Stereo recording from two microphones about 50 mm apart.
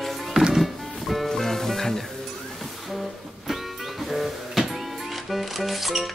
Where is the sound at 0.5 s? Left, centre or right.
Centre.